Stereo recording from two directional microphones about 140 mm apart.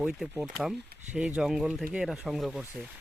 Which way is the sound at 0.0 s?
5° right (ahead or behind).